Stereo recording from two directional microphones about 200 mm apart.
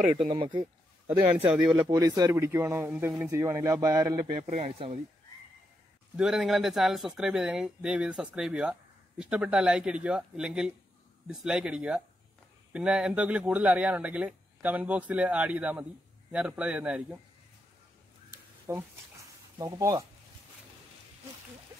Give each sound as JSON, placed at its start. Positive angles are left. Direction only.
{"t": 0.3, "sound": "speech", "side_deg": -25}
{"t": 1.7, "sound": "speech", "side_deg": -20}
{"t": 6.1, "sound": "speech", "side_deg": 0}
{"t": 18.7, "sound": "speech", "side_deg": -15}